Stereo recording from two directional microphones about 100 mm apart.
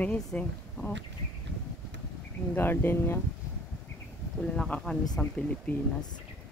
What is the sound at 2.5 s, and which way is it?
Speech, 20° left (ahead or behind).